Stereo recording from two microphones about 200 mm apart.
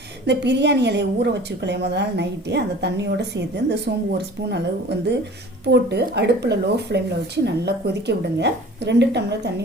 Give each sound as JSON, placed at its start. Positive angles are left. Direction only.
{"t": 0.3, "sound": "a woman's voice", "side_deg": -60}